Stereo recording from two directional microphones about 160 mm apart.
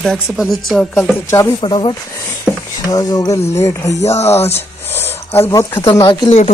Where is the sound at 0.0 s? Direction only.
Centre (ahead or behind).